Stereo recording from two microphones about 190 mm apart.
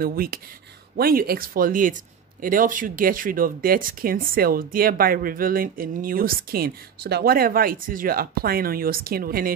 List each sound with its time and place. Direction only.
0.0 s speech: 50° right (ahead or behind)